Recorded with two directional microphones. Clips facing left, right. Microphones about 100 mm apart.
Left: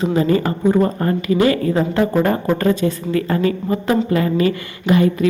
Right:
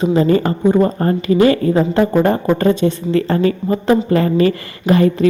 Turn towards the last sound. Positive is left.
turn(degrees=-35)  # may be behind; listen again after turning